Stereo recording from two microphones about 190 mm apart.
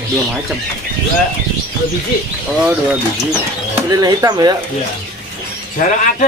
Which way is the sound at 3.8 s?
20° right (ahead or behind).